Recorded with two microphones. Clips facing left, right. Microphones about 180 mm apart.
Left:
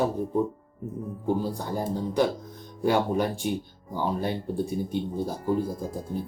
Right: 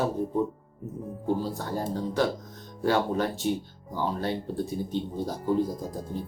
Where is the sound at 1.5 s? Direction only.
15° left (ahead or behind).